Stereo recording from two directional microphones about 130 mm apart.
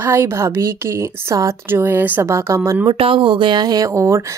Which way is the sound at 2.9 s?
40° right (ahead or behind).